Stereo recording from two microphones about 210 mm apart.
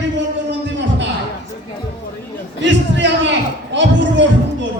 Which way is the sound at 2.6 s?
60° right (ahead or behind).